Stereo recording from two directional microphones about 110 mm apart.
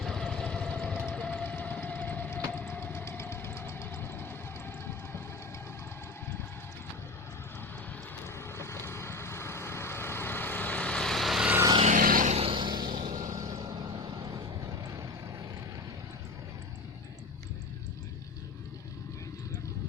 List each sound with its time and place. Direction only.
0.0 s vehicle: 5° left (ahead or behind)
1.1 s a sound: 10° left (ahead or behind)
8.2 s vehicle: 25° left (ahead or behind); by 11.4 s centre (ahead or behind)
11.8 s vehicle: 85° right
12.5 s vehicle: 45° right (ahead or behind)